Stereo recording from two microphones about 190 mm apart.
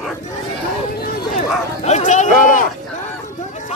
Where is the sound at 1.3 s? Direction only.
35° left (ahead or behind).